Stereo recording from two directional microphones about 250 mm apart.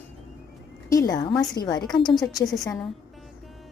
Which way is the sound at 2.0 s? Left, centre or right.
Centre.